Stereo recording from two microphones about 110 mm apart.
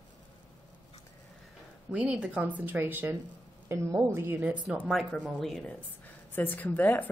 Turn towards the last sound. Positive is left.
turn(degrees=15)  # may be behind; listen again after turning